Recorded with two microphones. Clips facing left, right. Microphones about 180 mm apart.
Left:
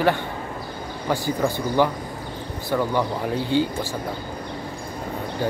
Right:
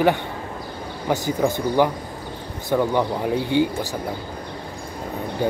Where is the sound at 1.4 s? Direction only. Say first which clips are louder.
Right 2 dB; 15° right (ahead or behind).